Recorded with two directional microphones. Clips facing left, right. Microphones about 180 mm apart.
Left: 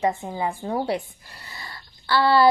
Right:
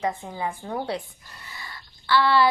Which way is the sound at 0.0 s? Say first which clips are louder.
Left 4 dB; 25° left (ahead or behind).